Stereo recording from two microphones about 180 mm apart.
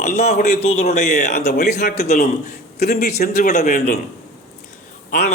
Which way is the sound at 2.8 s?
60° left (ahead or behind).